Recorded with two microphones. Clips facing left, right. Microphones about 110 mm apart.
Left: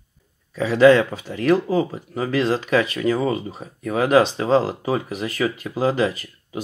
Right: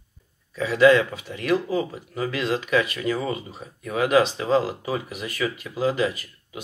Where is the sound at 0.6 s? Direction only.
35° left (ahead or behind).